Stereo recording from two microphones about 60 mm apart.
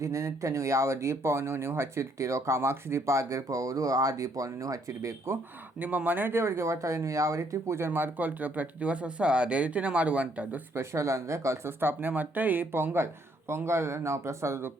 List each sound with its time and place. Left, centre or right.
0.0 s speech: right
5.8 s speech: right
7.8 s speech: right
10.8 s speech: right